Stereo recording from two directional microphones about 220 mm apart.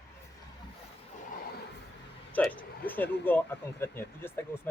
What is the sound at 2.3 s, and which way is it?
Speech, 5° left (ahead or behind).